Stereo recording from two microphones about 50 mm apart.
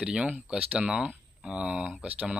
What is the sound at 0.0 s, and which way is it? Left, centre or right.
Speech, right.